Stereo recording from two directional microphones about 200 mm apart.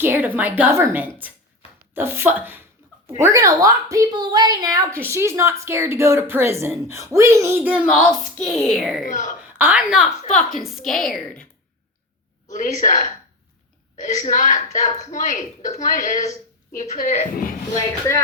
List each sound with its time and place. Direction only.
0.0 s a woman's voice: 10° right (ahead or behind)
9.0 s a woman's voice: 40° left (ahead or behind)
9.6 s a woman's voice: 10° right (ahead or behind)
12.5 s a woman's voice: 40° left (ahead or behind)